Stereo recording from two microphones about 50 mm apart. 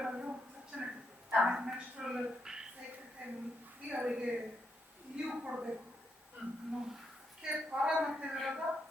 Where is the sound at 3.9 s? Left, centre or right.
Centre.